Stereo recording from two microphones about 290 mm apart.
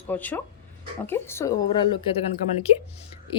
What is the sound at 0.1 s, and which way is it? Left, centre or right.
A woman's voice, centre.